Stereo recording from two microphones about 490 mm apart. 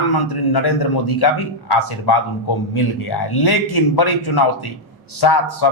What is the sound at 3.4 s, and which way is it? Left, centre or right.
A man's voice, left.